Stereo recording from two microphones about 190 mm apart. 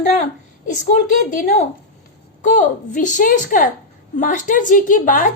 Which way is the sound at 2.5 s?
40° left (ahead or behind).